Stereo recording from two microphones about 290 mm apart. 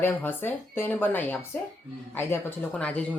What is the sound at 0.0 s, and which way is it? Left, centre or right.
Speech, centre.